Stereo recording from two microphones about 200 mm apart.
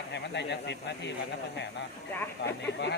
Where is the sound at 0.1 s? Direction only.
60° left (ahead or behind).